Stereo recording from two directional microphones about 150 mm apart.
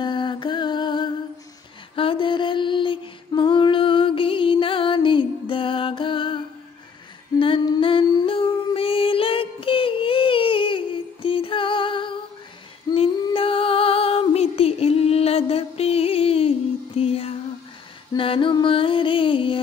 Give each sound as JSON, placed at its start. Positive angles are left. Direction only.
{"t": 0.0, "sound": "mantra", "side_deg": 30}
{"t": 2.0, "sound": "music", "side_deg": 35}
{"t": 7.3, "sound": "a sound", "side_deg": 35}
{"t": 11.2, "sound": "music", "side_deg": 35}